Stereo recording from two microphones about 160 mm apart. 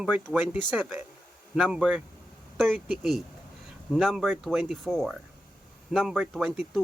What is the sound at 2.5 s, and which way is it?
A man's voice, centre (ahead or behind).